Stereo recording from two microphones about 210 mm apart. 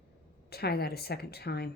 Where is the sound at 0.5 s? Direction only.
50° left (ahead or behind).